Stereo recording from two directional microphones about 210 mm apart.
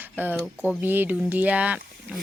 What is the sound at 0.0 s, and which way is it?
Speech, 10° right (ahead or behind).